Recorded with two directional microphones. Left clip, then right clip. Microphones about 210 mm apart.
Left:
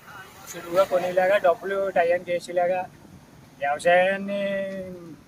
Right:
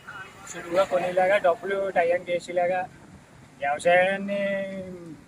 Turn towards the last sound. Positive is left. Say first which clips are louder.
# even
turn(degrees=0)  # may be behind; listen again after turning